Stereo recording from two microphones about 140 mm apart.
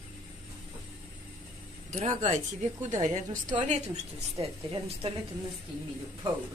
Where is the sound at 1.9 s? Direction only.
60° right (ahead or behind); by 5.1 s 45° right (ahead or behind).